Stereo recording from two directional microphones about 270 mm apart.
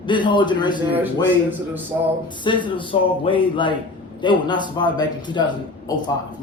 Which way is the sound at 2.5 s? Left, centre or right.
Centre.